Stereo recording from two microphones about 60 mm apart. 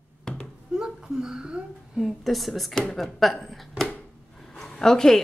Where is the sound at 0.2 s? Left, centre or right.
Centre.